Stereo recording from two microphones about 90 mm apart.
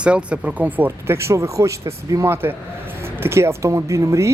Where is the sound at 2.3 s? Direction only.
25° right (ahead or behind).